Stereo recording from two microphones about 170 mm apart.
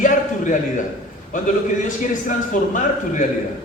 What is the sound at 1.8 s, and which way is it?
A man's voice, 50° left (ahead or behind).